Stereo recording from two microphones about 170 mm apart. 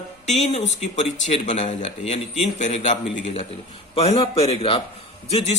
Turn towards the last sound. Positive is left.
turn(degrees=40)  # may be behind; listen again after turning